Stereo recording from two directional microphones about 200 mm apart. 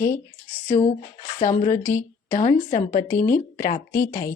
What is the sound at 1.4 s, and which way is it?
Speech, 40° left (ahead or behind).